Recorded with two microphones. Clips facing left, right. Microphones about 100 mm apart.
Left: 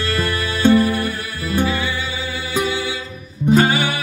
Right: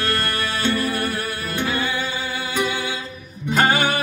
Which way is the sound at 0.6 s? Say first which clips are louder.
Left 10 dB; 50° left (ahead or behind).